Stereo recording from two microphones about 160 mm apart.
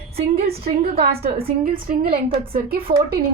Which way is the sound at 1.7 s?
65° right (ahead or behind).